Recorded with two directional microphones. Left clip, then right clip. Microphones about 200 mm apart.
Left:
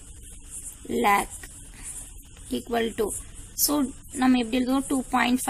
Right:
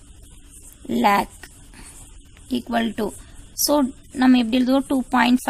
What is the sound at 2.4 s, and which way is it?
Speech, 55° right (ahead or behind).